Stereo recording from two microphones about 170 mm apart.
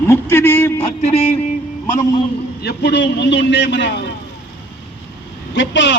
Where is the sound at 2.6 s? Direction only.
75° left (ahead or behind); by 4.1 s 90° left.